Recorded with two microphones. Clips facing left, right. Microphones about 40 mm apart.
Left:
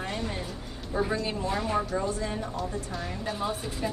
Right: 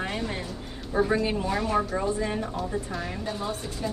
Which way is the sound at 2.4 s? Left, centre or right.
Centre.